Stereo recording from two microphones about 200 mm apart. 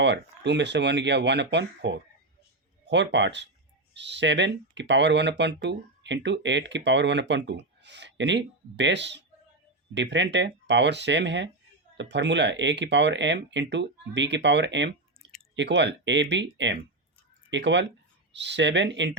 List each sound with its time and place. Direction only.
0.0 s speech: 60° right (ahead or behind)